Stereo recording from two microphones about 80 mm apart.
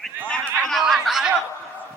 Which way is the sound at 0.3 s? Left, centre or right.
Centre.